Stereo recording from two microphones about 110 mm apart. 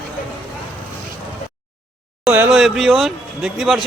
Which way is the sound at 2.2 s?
15° right (ahead or behind).